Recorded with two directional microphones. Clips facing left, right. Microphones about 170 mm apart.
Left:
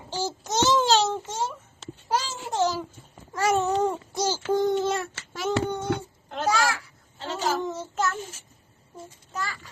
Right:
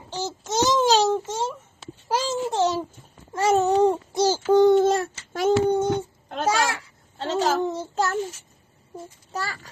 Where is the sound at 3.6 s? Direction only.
35° right (ahead or behind).